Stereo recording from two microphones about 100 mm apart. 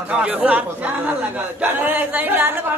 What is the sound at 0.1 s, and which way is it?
A man's voice, 10° right (ahead or behind).